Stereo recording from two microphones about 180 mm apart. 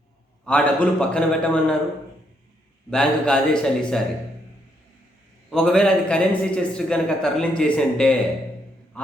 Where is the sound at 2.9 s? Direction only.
5° left (ahead or behind).